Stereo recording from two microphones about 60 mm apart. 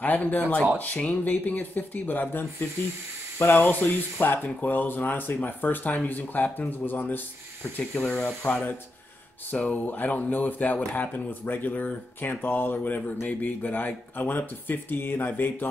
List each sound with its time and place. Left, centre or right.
0.0 s speech: left
3.3 s speech: left
8.0 s speech: centre
8.5 s speech: left